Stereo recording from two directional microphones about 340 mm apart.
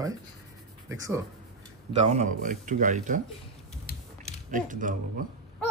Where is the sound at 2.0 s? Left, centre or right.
Centre.